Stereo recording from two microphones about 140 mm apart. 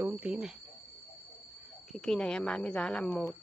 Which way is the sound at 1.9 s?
5° left (ahead or behind).